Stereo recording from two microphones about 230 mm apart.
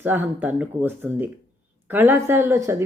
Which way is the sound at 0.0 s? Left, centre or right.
Centre.